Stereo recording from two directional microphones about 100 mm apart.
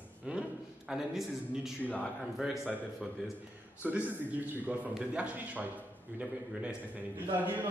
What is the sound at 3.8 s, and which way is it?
A man's voice, 15° right (ahead or behind).